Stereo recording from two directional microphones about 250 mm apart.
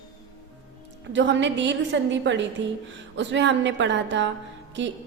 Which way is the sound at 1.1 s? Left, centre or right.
Right.